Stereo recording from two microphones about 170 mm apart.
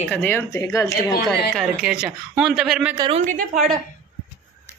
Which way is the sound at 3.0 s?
35° right (ahead or behind).